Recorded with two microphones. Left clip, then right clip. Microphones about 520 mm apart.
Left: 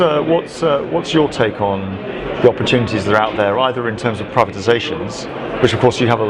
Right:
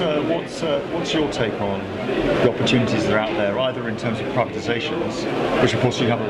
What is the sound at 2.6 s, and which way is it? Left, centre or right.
Speech, left.